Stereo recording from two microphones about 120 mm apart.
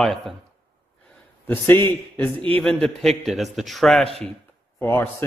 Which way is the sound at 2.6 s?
5° left (ahead or behind).